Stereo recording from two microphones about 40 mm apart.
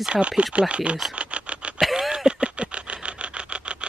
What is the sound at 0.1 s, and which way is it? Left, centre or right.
Speech, right.